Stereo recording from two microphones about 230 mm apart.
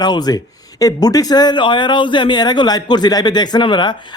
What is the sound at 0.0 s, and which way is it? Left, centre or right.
Speech, centre.